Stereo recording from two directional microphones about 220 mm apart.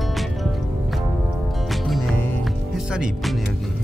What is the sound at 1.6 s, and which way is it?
Music, centre (ahead or behind).